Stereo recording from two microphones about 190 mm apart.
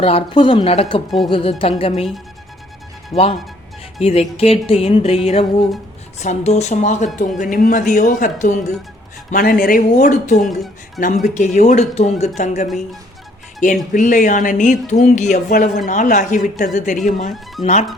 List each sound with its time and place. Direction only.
0.0 s speech: 30° left (ahead or behind)
3.1 s speech: 35° left (ahead or behind)
12.6 s speech: centre (ahead or behind)
13.9 s speech: 40° left (ahead or behind)